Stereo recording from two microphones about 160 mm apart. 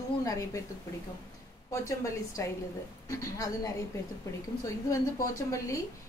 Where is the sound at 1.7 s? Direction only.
20° left (ahead or behind).